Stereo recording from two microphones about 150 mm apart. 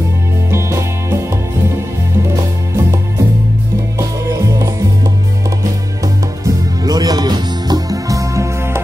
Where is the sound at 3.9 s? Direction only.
20° right (ahead or behind).